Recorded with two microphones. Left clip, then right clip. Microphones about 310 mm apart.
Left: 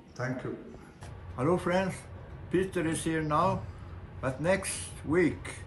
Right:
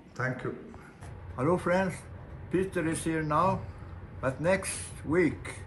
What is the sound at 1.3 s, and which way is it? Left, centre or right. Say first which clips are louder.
A man's voice: right 1 dB; centre.